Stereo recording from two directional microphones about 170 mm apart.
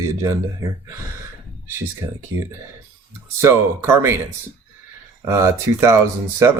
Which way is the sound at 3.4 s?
15° right (ahead or behind).